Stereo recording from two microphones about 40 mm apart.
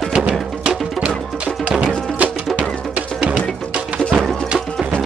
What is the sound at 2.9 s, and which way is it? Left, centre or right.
Music, right.